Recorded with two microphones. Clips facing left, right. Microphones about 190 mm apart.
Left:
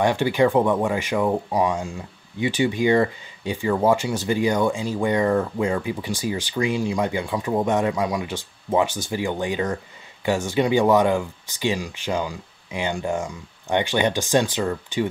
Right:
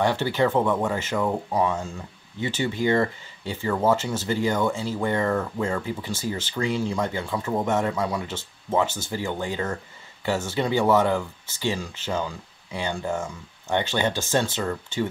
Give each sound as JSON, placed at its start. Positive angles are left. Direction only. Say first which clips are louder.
{"t": 0.0, "sound": "speech", "louder": "left 3 dB", "side_deg": 15}